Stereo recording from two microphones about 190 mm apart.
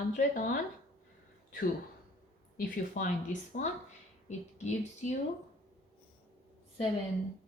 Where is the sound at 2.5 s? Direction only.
45° left (ahead or behind).